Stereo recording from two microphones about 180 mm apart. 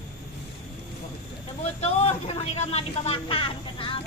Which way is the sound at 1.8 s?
35° left (ahead or behind).